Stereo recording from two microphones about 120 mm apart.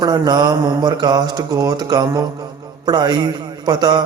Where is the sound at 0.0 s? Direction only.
35° right (ahead or behind).